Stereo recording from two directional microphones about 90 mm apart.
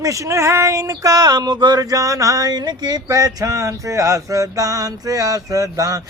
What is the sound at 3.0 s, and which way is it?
Speech, 40° right (ahead or behind).